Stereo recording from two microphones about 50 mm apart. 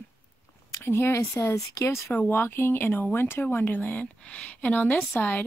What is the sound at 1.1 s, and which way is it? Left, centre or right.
Speech, left.